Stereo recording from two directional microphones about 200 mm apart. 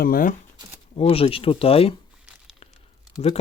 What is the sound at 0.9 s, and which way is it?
Speech, 30° left (ahead or behind).